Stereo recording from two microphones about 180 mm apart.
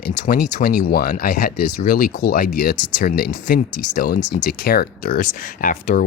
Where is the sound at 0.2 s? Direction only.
55° left (ahead or behind).